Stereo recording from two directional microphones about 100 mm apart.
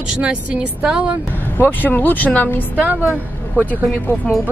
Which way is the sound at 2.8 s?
20° right (ahead or behind).